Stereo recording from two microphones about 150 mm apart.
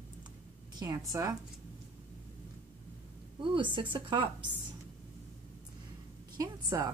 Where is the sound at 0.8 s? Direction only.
25° right (ahead or behind).